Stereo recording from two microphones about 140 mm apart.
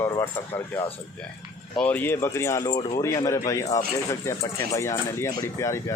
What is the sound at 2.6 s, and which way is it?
Speech, 30° left (ahead or behind).